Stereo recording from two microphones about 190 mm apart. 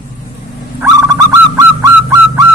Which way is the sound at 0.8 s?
20° right (ahead or behind).